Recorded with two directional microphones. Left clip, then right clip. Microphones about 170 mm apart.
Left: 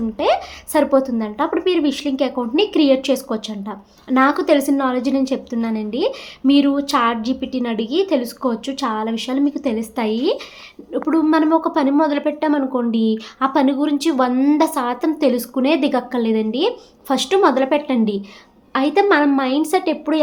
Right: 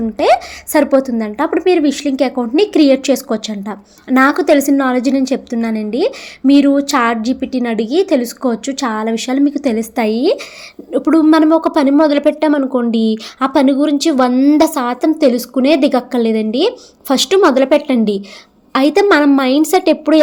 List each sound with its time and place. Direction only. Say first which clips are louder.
0.2 s a woman's voice: right 6 dB; 30° right (ahead or behind)